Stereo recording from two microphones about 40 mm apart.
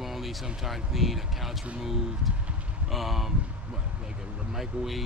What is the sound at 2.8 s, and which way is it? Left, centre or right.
Speech, centre.